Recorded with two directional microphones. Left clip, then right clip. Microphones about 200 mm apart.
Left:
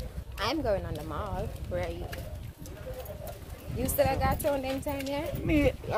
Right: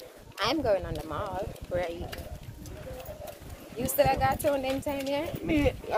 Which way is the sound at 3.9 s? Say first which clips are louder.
Right 3 dB; 5° right (ahead or behind).